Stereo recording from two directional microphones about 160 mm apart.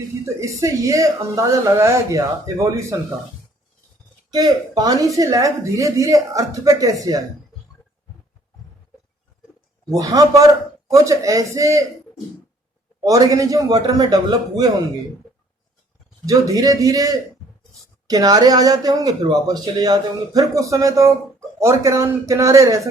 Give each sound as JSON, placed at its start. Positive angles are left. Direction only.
{"t": 0.3, "sound": "a woman's voice", "side_deg": -20}
{"t": 4.3, "sound": "a woman's voice", "side_deg": -25}
{"t": 9.9, "sound": "a woman's voice", "side_deg": -20}
{"t": 13.1, "sound": "a woman's voice", "side_deg": -20}
{"t": 16.2, "sound": "a woman's voice", "side_deg": -20}